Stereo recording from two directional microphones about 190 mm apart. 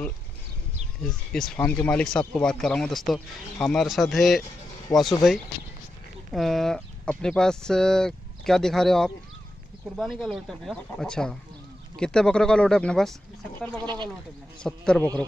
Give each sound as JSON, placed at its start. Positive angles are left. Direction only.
{"t": 1.0, "sound": "speech", "side_deg": 5}
{"t": 13.8, "sound": "speech", "side_deg": -25}
{"t": 14.6, "sound": "speech", "side_deg": 5}